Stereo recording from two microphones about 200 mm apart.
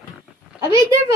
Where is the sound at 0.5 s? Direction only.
15° right (ahead or behind).